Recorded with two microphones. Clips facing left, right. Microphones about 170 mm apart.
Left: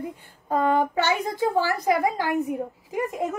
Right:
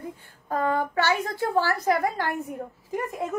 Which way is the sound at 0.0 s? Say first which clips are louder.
Left 4 dB; 20° left (ahead or behind).